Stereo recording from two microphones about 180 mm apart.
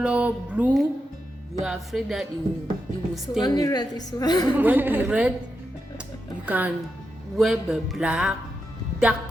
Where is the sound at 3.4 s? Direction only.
20° left (ahead or behind).